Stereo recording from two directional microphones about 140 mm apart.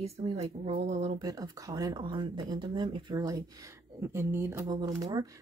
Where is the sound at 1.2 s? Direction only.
25° right (ahead or behind).